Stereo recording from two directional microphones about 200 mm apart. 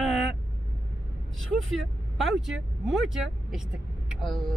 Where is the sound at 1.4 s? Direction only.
Centre (ahead or behind).